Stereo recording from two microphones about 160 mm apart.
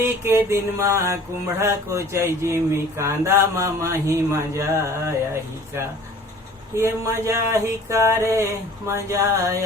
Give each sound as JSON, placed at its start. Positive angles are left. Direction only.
{"t": 0.0, "sound": "speech", "side_deg": -15}